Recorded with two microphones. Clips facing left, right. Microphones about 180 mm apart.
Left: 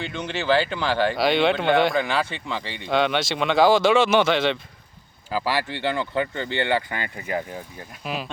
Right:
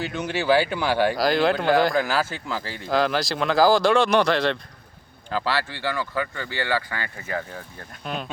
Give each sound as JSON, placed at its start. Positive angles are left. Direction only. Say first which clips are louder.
{"t": 0.0, "sound": "speech", "louder": "right 2 dB", "side_deg": -5}
{"t": 5.3, "sound": "speech", "louder": "left 1 dB", "side_deg": 15}
{"t": 8.0, "sound": "speech", "louder": "left 1 dB", "side_deg": 5}